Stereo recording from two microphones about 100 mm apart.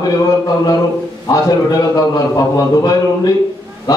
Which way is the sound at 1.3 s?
40° left (ahead or behind).